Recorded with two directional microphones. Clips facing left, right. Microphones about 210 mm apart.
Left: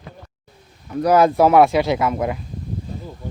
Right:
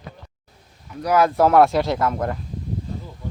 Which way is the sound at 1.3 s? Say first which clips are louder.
Left 2 dB; 5° left (ahead or behind).